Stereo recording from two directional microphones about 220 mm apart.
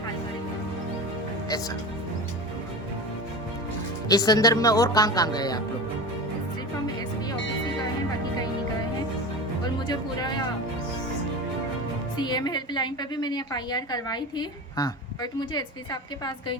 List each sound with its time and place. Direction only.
4.1 s speech: 15° left (ahead or behind)
9.8 s a woman's voice: 20° left (ahead or behind)
12.1 s a woman's voice: 20° left (ahead or behind)